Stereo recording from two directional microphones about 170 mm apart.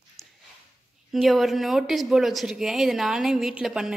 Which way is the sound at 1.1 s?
Centre (ahead or behind).